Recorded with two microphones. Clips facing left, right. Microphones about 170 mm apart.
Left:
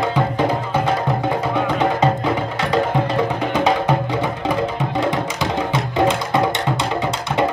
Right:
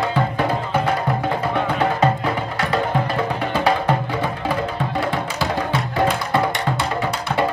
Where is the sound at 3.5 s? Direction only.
20° left (ahead or behind).